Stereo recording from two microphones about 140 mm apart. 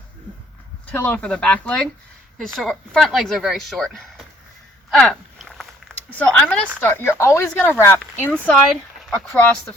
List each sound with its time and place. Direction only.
0.9 s speech: 10° left (ahead or behind)
4.9 s a sound: 5° left (ahead or behind)
6.1 s speech: 10° left (ahead or behind)